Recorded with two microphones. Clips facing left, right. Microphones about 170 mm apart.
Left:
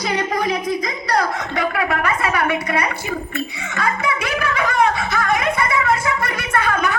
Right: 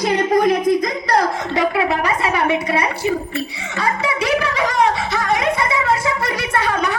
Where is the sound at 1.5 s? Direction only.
25° right (ahead or behind).